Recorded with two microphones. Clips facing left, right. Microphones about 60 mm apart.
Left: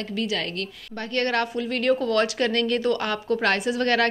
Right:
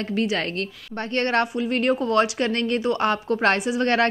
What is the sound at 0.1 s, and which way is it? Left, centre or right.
A woman's voice, right.